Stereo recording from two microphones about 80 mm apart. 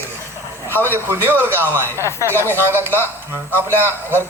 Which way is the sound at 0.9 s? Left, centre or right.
Right.